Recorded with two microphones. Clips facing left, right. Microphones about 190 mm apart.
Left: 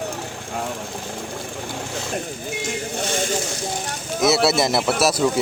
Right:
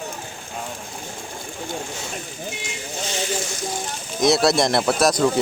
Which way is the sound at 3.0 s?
55° left (ahead or behind).